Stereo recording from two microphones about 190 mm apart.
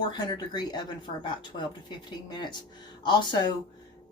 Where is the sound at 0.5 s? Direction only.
20° left (ahead or behind).